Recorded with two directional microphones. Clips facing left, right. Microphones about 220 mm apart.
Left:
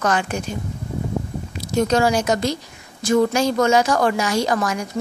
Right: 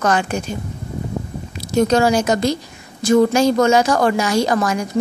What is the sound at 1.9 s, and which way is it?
A woman's voice, 35° right (ahead or behind).